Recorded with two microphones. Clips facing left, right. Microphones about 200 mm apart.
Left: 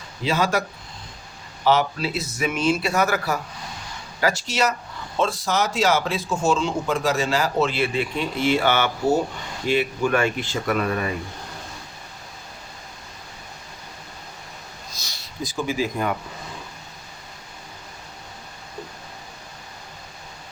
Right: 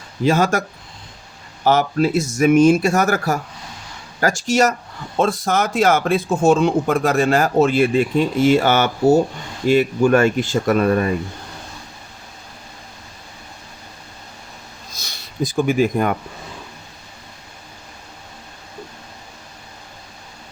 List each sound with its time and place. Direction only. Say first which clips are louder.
0.3 s speech: right 5 dB; 50° right (ahead or behind)
1.6 s speech: right 4 dB; 50° right (ahead or behind)
15.5 s speech: right 8 dB; 55° right (ahead or behind)